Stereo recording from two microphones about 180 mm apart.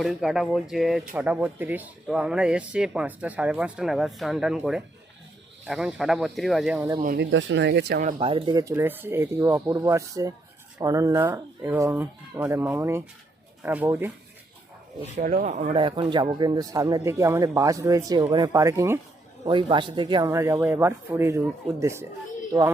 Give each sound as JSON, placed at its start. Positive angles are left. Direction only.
{"t": 0.0, "sound": "speech", "side_deg": 0}
{"t": 7.2, "sound": "speech", "side_deg": -90}
{"t": 8.2, "sound": "speech", "side_deg": -30}
{"t": 15.2, "sound": "speech", "side_deg": -45}
{"t": 19.5, "sound": "speech", "side_deg": -25}